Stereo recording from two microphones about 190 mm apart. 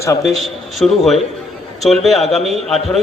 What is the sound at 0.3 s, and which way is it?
A man's voice, centre (ahead or behind).